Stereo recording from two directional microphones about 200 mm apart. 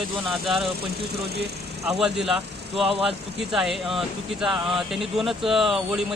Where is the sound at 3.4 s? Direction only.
Centre (ahead or behind).